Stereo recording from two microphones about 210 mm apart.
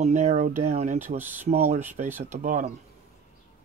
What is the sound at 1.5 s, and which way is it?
Speech, 30° right (ahead or behind).